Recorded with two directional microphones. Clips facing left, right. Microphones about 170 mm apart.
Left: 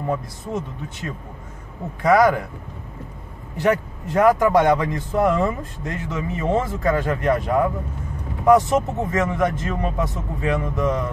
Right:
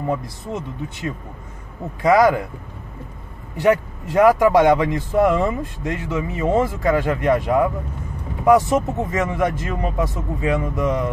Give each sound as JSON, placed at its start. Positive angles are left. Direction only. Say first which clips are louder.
{"t": 2.0, "sound": "speech", "louder": "right 1 dB", "side_deg": -10}
{"t": 3.6, "sound": "speech", "louder": "right 3 dB", "side_deg": -10}